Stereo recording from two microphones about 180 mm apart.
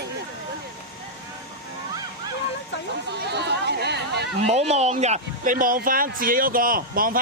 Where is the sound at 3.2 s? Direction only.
70° right (ahead or behind).